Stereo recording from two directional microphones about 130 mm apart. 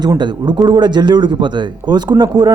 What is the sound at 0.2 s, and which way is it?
A man's voice, 35° right (ahead or behind).